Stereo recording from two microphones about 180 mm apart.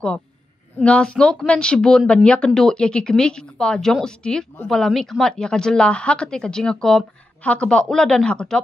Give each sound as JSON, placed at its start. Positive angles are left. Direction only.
{"t": 0.7, "sound": "speech", "side_deg": 5}